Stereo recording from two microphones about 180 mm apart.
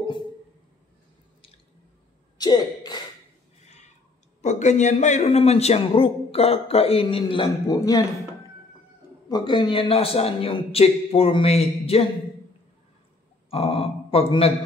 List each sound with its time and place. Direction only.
2.3 s speech: 20° left (ahead or behind)
3.6 s a sound: 40° left (ahead or behind)
4.4 s a man's voice: 40° left (ahead or behind); by 8.0 s 20° left (ahead or behind)
9.3 s a man's voice: 25° left (ahead or behind)
13.5 s speech: 30° left (ahead or behind)